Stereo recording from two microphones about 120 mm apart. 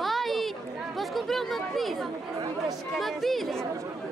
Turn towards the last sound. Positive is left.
turn(degrees=0)  # may be behind; listen again after turning